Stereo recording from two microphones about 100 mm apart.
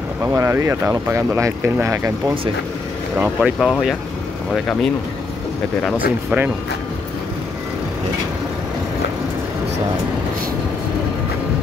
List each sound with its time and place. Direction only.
0.3 s speech: 30° right (ahead or behind)
3.2 s speech: 15° right (ahead or behind)
3.5 s speech: centre (ahead or behind)
5.9 s speech: 15° right (ahead or behind)